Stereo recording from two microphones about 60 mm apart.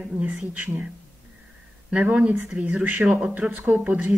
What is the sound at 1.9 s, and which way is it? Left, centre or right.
A man's voice, centre.